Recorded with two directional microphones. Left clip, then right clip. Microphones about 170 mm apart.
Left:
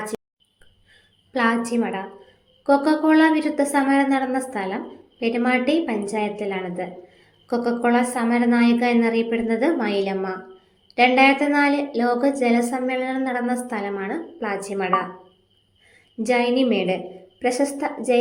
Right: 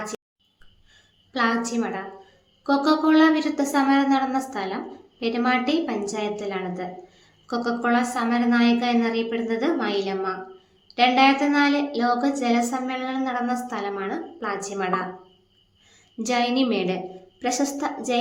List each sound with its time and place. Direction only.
1.3 s a woman's voice: 15° left (ahead or behind)
16.1 s a woman's voice: 10° left (ahead or behind)